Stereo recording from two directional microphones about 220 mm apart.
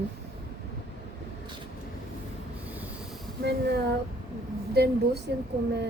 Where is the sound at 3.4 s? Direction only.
50° right (ahead or behind).